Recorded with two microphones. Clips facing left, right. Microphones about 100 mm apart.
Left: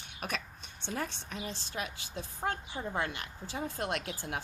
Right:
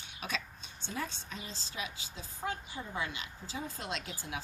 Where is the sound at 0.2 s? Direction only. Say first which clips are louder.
Left 1 dB; 55° left (ahead or behind).